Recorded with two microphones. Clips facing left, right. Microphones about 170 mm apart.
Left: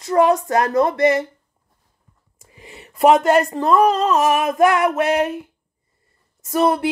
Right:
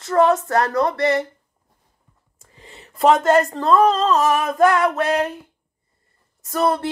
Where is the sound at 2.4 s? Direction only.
15° left (ahead or behind).